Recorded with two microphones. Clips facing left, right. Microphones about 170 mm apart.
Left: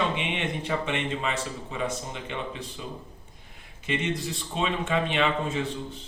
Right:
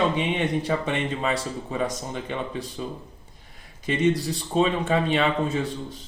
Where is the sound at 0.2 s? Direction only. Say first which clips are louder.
Right 6 dB; 40° right (ahead or behind).